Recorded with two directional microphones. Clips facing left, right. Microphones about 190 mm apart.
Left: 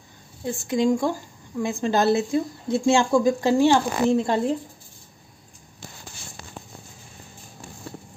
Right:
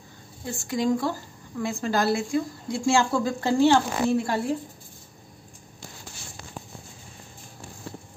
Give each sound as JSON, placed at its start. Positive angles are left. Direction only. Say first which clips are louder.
{"t": 0.5, "sound": "speech", "louder": "left 3 dB", "side_deg": 20}